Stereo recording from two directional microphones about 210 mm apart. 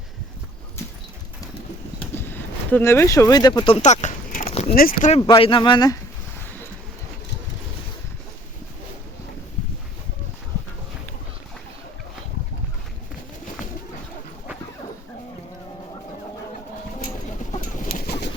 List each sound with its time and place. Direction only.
2.1 s a sound: 10° left (ahead or behind); by 4.7 s 30° left (ahead or behind)
4.7 s speech: 45° left (ahead or behind)
5.2 s speech: 25° left (ahead or behind)
17.5 s bird: 40° left (ahead or behind)